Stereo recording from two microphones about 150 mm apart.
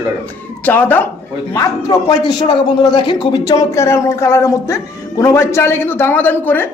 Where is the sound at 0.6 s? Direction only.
10° left (ahead or behind).